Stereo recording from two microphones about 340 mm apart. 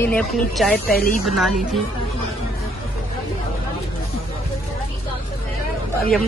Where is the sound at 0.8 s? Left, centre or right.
Left.